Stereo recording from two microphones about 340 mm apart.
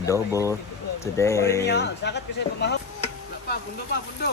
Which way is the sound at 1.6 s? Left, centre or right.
Left.